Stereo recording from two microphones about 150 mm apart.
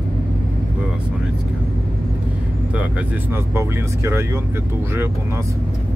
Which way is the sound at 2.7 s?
10° right (ahead or behind).